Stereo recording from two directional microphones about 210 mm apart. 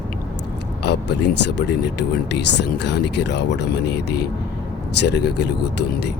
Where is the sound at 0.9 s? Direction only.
55° left (ahead or behind).